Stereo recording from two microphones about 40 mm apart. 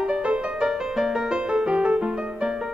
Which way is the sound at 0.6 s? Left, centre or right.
Centre.